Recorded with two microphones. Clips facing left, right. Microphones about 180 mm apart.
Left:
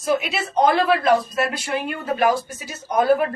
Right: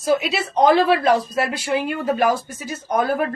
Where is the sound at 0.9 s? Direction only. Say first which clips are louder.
Right 1 dB; 30° right (ahead or behind).